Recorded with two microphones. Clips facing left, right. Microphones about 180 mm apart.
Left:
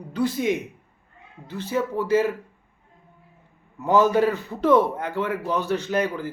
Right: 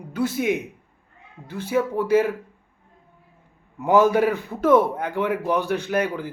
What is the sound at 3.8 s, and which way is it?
Speech, 10° right (ahead or behind).